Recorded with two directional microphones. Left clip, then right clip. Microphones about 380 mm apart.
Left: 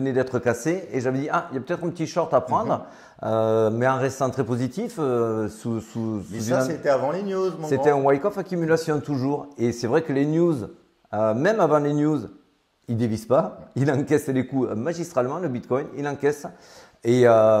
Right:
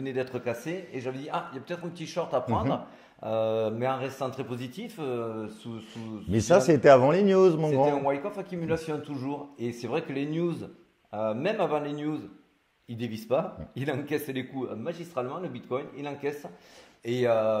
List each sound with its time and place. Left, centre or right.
0.0 s a man's voice: left
6.3 s speech: right
7.8 s a man's voice: left
11.1 s a man's voice: left